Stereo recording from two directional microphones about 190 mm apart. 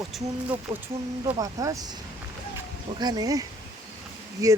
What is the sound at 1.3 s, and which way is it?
Speech, 20° right (ahead or behind).